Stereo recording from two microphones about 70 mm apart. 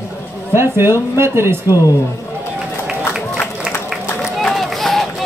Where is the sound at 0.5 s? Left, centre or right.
Right.